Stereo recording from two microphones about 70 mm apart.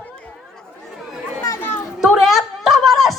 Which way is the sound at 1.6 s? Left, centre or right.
Left.